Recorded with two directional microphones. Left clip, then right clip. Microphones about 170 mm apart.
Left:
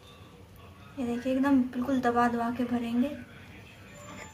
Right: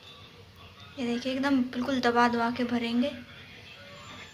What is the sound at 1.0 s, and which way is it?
A woman's voice, 5° right (ahead or behind).